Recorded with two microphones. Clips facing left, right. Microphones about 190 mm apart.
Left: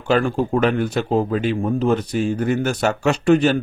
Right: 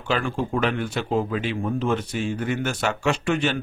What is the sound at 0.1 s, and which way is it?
Speech, 40° left (ahead or behind).